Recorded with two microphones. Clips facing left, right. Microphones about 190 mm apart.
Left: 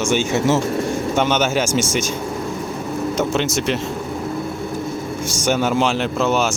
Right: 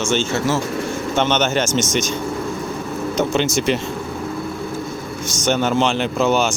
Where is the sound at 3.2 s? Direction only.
Centre (ahead or behind).